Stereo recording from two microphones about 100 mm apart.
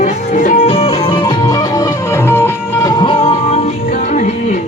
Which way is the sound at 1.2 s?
40° left (ahead or behind).